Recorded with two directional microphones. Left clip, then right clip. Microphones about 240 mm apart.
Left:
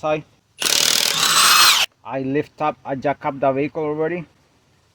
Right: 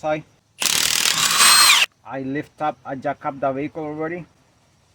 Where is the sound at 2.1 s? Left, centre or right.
Left.